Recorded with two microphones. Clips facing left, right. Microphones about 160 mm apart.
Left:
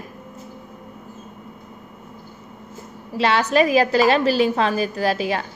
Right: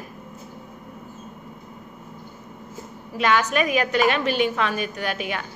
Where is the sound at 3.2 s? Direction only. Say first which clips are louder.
Left 3 dB; 30° left (ahead or behind).